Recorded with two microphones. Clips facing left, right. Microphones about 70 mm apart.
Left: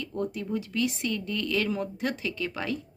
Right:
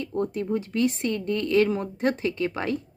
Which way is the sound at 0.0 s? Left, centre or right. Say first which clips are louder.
Right 4 dB; right.